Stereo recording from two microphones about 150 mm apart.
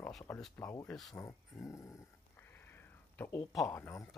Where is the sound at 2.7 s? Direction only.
15° left (ahead or behind).